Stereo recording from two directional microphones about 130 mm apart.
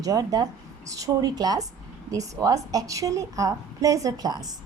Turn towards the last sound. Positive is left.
turn(degrees=-30)  # may be behind; listen again after turning